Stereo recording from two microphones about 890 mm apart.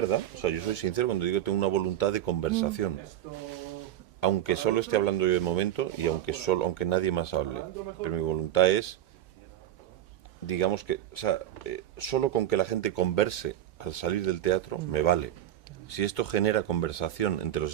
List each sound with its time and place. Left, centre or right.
0.0 s speech: left
4.2 s speech: left
10.4 s speech: left